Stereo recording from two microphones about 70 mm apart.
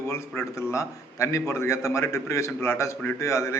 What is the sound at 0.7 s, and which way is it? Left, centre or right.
A man's voice, left.